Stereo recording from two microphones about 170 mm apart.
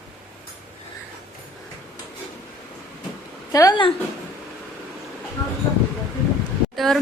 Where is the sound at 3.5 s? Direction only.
20° left (ahead or behind).